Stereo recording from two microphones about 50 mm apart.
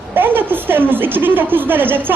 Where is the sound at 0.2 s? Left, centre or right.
Right.